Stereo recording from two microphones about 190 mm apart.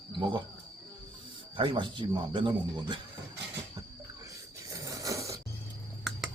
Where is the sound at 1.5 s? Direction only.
25° right (ahead or behind).